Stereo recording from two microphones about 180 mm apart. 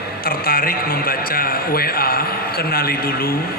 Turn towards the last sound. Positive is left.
turn(degrees=55)  # may be behind; listen again after turning